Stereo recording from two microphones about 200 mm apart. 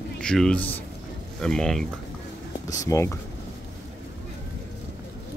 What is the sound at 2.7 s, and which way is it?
Speech, 15° left (ahead or behind).